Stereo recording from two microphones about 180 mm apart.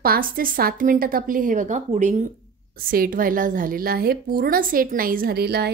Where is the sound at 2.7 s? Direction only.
55° right (ahead or behind).